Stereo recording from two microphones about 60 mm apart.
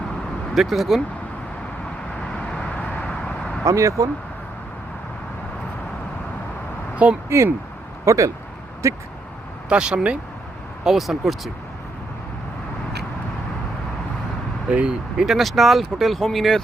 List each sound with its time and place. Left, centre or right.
0.5 s speech: centre
2.3 s vehicle: centre
3.6 s speech: right
6.9 s speech: right
7.3 s speech: right
9.6 s speech: centre
10.8 s speech: centre
14.7 s speech: centre
15.4 s speech: centre